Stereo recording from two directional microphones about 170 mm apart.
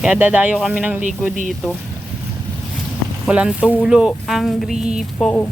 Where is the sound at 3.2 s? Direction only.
5° right (ahead or behind).